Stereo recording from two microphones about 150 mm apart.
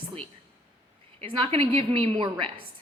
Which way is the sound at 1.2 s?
35° right (ahead or behind).